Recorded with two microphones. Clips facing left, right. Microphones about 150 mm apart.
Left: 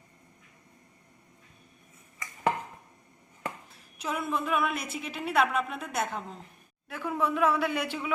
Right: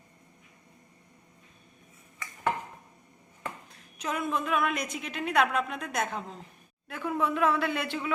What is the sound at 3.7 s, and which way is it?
Speech, 5° left (ahead or behind).